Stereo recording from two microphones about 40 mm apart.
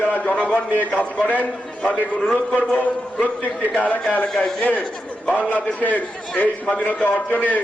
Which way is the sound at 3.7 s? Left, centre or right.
Left.